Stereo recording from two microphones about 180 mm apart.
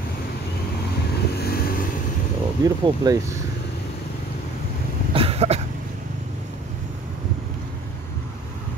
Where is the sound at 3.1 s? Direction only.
20° right (ahead or behind).